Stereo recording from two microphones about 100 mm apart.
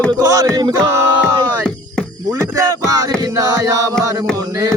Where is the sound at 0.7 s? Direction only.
30° right (ahead or behind).